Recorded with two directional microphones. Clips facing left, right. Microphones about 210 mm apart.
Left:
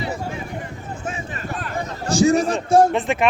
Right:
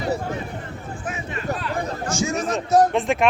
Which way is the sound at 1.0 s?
35° left (ahead or behind).